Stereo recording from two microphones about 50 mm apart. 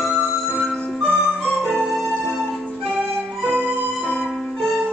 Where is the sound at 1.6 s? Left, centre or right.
Centre.